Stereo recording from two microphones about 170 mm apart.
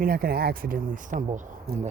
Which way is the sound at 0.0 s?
60° right (ahead or behind).